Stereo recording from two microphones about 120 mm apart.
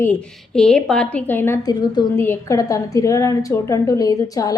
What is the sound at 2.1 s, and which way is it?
A woman's voice, 20° left (ahead or behind).